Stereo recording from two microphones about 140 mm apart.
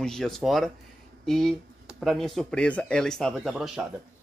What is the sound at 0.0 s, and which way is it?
Speech, 5° left (ahead or behind).